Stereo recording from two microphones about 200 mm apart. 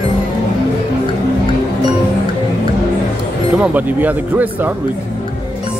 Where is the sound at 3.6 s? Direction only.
10° right (ahead or behind).